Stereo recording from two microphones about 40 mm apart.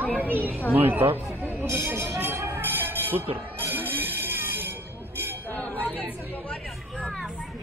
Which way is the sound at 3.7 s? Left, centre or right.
Right.